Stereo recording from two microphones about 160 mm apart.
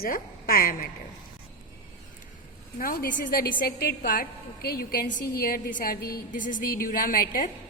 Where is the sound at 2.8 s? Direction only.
60° left (ahead or behind).